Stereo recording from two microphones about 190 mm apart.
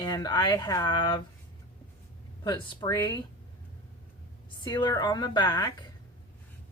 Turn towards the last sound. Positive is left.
turn(degrees=20)  # may be behind; listen again after turning